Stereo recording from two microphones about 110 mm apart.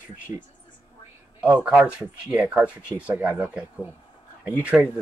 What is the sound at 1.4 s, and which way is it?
Speech, 15° right (ahead or behind).